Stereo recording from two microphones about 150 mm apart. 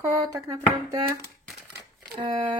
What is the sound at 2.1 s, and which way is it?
Speech, 30° right (ahead or behind).